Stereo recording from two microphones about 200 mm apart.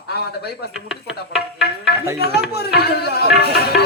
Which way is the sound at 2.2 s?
55° left (ahead or behind).